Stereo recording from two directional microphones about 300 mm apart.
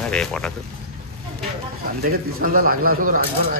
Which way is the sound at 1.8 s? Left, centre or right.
Right.